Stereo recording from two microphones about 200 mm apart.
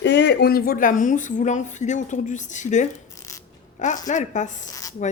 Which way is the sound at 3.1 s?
15° left (ahead or behind).